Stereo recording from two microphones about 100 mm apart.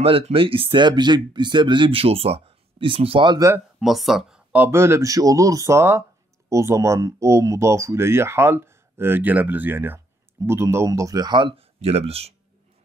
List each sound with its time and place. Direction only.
0.0 s speech: 70° right (ahead or behind)
3.3 s speech: 35° right (ahead or behind)
3.8 s speech: centre (ahead or behind)
4.6 s speech: 25° right (ahead or behind); by 11.6 s 55° right (ahead or behind)
11.8 s speech: 90° right